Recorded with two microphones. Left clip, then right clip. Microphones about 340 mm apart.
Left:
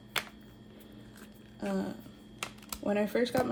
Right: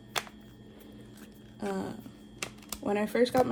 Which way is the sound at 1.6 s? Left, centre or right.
Centre.